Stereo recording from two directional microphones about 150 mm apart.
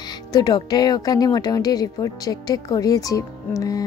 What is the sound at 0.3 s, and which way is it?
Speech, 25° left (ahead or behind).